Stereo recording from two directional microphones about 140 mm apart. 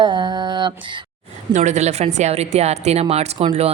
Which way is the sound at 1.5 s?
55° right (ahead or behind).